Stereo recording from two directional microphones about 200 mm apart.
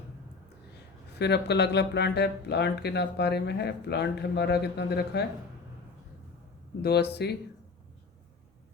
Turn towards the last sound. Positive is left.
turn(degrees=55)  # may be behind; listen again after turning